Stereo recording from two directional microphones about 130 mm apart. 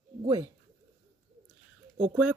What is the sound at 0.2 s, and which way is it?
Speech, 35° right (ahead or behind).